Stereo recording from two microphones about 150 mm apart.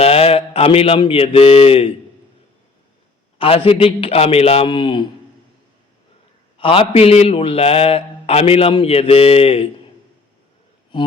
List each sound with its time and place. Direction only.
0.0 s mantra: 40° left (ahead or behind)
3.3 s a man's voice: 40° left (ahead or behind)
6.6 s a man's voice: 35° left (ahead or behind)